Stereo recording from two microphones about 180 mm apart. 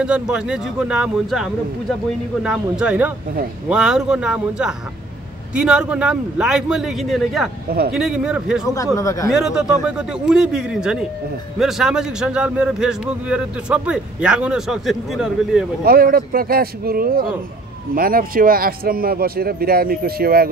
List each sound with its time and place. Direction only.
0.0 s a man's voice: 5° right (ahead or behind)
8.6 s speech: 15° left (ahead or behind)
9.3 s a man's voice: 5° right (ahead or behind)
15.8 s speech: 55° right (ahead or behind)